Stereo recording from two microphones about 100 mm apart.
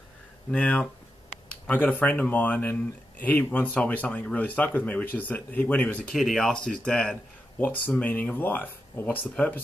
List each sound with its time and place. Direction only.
0.5 s speech: 10° left (ahead or behind)
6.1 s speech: 5° left (ahead or behind)